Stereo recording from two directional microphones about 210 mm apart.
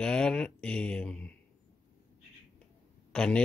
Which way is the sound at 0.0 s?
5° left (ahead or behind).